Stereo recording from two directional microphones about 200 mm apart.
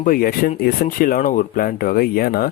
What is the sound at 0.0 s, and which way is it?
Speech, 45° left (ahead or behind).